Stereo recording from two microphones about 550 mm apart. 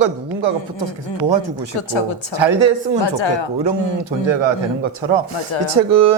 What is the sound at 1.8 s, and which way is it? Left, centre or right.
Speech, left.